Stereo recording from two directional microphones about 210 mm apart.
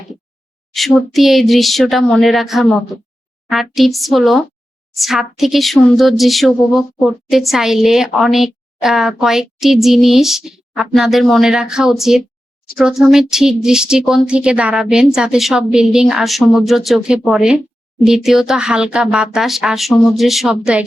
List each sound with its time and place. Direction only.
0.7 s speech: centre (ahead or behind)